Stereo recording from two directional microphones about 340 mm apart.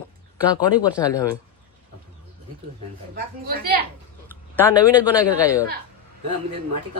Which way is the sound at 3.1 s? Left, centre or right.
Right.